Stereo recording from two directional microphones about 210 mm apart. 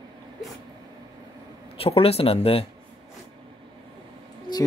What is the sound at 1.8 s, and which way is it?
Speech, 30° left (ahead or behind).